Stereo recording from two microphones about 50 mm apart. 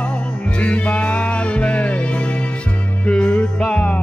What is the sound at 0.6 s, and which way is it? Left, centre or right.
Music, left.